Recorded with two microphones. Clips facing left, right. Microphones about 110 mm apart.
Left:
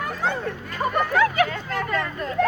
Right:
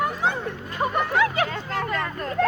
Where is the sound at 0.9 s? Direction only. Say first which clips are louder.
Left 2 dB; 25° right (ahead or behind); by 2.4 s 40° right (ahead or behind).